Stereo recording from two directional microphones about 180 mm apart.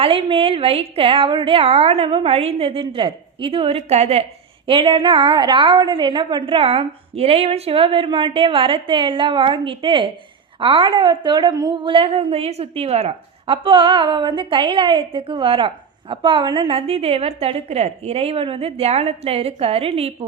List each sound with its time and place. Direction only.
0.0 s a woman's voice: 30° right (ahead or behind)